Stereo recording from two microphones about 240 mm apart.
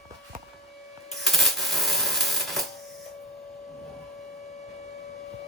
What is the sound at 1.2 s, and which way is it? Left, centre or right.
Coin, centre.